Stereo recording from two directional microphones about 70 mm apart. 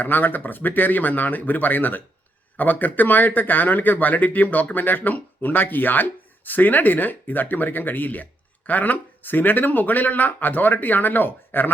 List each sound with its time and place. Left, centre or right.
0.0 s speech: left